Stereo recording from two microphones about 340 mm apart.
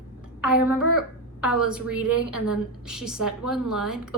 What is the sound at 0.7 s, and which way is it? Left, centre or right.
Speech, right.